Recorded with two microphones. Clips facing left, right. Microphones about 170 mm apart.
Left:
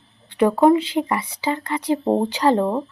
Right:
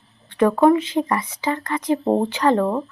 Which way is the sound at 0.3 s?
15° left (ahead or behind).